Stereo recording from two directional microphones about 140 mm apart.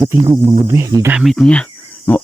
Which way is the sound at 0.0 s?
30° right (ahead or behind).